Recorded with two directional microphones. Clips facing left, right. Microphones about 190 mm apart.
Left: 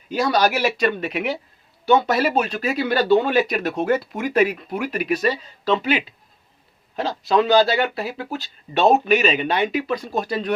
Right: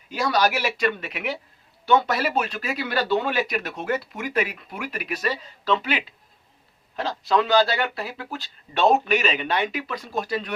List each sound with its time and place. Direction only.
0.1 s speech: 25° left (ahead or behind)
3.7 s speech: 40° left (ahead or behind); by 6.0 s 20° left (ahead or behind)
7.1 s speech: 20° left (ahead or behind)